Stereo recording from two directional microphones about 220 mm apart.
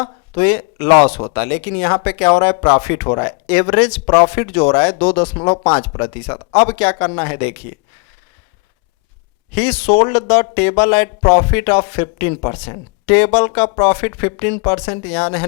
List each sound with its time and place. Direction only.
0.0 s speech: 20° left (ahead or behind)
0.9 s speech: 25° left (ahead or behind)
4.3 s speech: 15° left (ahead or behind)
9.6 s speech: 10° left (ahead or behind)
9.9 s speech: 25° left (ahead or behind)
12.3 s speech: 30° left (ahead or behind)
12.6 s speech: 20° left (ahead or behind)